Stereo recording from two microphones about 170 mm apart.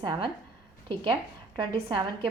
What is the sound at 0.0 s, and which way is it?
Speech, 25° right (ahead or behind).